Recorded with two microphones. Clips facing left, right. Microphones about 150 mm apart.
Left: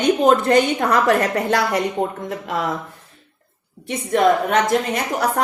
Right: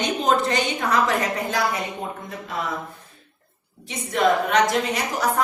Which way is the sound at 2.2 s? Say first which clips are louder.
Left 6 dB; 90° left.